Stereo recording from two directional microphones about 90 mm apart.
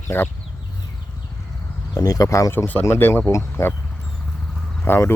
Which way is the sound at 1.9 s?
40° left (ahead or behind).